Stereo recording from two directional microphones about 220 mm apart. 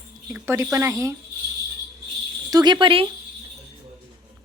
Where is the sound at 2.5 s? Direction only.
20° right (ahead or behind).